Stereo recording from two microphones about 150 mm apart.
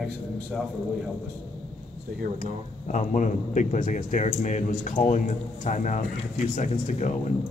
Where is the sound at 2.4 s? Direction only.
55° left (ahead or behind).